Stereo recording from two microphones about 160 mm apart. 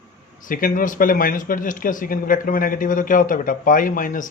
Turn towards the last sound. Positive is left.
turn(degrees=55)  # may be behind; listen again after turning